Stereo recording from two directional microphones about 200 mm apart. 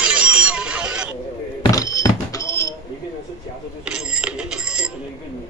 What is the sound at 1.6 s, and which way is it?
Music, 15° left (ahead or behind).